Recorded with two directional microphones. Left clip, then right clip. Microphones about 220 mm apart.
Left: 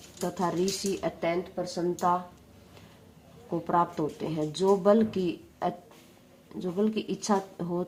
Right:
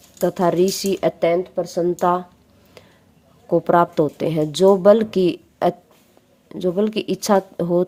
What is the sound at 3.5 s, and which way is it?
Speech, 40° right (ahead or behind).